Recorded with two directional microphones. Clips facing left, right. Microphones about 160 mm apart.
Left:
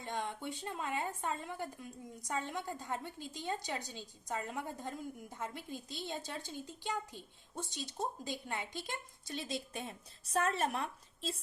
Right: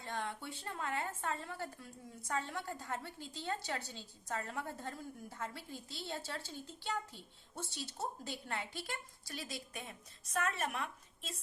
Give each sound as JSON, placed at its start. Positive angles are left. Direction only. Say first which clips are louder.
{"t": 0.0, "sound": "speech", "louder": "left 2 dB", "side_deg": 15}